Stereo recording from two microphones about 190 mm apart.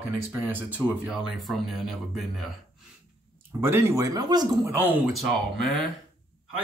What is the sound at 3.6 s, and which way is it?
Speech, 15° right (ahead or behind).